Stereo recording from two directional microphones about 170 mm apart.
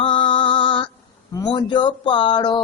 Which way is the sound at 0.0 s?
30° left (ahead or behind).